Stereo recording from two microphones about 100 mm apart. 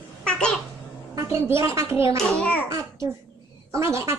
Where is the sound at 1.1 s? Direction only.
30° right (ahead or behind).